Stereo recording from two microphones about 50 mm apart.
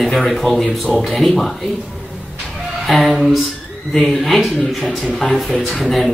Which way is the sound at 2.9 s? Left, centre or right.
Centre.